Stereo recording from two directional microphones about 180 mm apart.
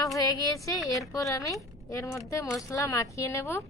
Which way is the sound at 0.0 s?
20° left (ahead or behind).